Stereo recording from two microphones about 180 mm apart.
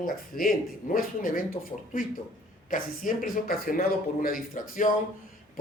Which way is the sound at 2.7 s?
50° left (ahead or behind).